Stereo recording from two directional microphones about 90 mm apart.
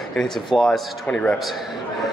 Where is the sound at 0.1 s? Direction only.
5° left (ahead or behind).